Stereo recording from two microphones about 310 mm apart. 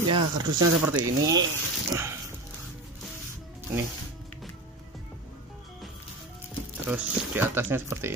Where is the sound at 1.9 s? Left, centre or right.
Centre.